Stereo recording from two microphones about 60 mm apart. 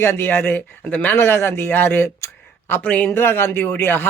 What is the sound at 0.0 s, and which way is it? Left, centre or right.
Speech, left.